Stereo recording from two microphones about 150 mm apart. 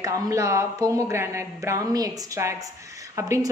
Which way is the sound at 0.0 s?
20° right (ahead or behind).